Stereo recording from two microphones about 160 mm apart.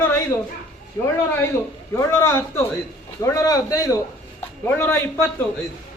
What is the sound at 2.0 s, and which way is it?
A man's voice, 15° left (ahead or behind).